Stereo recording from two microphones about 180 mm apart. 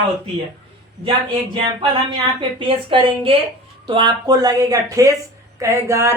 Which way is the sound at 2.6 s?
30° right (ahead or behind).